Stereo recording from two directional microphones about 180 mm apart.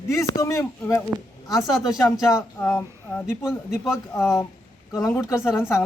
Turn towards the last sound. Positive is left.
turn(degrees=15)  # may be behind; listen again after turning